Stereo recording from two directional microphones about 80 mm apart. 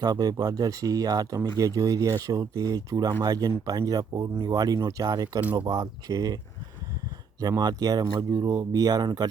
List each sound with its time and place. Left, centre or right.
0.0 s speech: right